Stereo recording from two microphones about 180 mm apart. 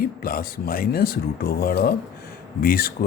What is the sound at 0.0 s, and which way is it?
A man's voice, 55° left (ahead or behind).